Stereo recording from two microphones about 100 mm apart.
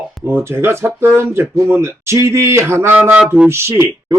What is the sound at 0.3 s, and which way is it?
Speech, 25° right (ahead or behind).